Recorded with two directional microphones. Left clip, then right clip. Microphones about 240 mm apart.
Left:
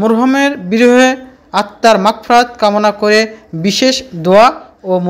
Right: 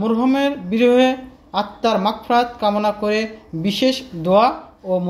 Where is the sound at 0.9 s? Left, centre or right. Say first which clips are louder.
Left 6 dB; left.